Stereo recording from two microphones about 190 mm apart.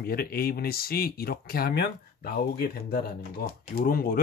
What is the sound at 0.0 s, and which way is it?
Speech, 55° left (ahead or behind).